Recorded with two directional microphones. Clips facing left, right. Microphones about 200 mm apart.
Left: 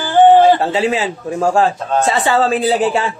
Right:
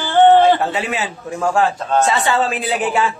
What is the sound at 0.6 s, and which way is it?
A man's voice, 30° left (ahead or behind).